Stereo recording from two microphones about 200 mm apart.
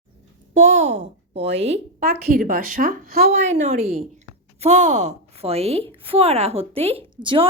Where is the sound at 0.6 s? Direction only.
35° right (ahead or behind).